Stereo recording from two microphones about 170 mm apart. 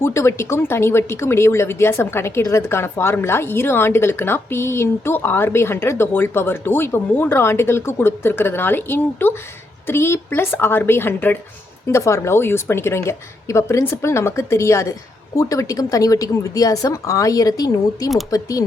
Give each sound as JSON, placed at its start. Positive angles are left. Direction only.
{"t": 0.0, "sound": "a woman's voice", "side_deg": 15}